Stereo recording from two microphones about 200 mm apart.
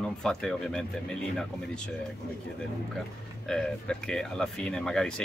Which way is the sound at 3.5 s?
5° left (ahead or behind).